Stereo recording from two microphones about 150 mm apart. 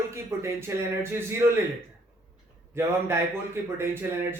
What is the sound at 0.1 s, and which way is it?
A man's voice, 20° right (ahead or behind).